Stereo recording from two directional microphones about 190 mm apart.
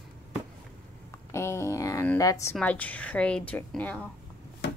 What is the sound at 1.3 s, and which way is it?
A woman's voice, 15° left (ahead or behind).